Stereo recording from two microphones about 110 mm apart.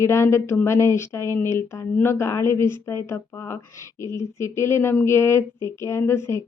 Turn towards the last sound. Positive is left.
turn(degrees=25)  # may be behind; listen again after turning